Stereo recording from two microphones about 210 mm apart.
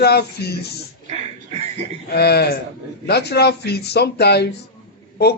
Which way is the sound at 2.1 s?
50° left (ahead or behind).